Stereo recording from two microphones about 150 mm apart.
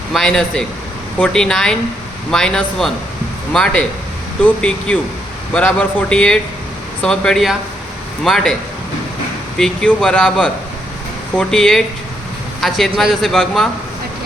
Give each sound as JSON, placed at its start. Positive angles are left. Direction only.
{"t": 0.1, "sound": "speech", "side_deg": 5}
{"t": 9.6, "sound": "speech", "side_deg": 5}